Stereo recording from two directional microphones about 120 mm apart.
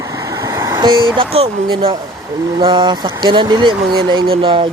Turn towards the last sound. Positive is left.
turn(degrees=-45)  # may be behind; listen again after turning